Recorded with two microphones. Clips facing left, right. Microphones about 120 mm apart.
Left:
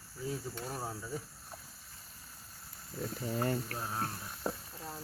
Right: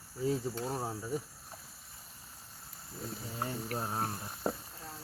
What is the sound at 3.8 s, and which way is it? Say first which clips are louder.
Speech: right 2 dB; 30° right (ahead or behind).